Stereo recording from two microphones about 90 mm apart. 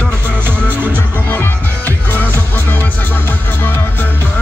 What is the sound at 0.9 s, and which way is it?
Music, 20° left (ahead or behind).